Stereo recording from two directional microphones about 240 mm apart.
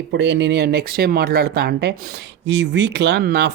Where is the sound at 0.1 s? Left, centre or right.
Right.